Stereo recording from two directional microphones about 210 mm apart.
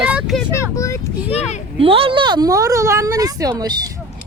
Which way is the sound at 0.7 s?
15° left (ahead or behind).